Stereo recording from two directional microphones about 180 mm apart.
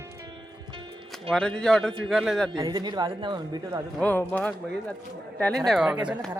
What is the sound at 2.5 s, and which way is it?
Speech, 25° right (ahead or behind).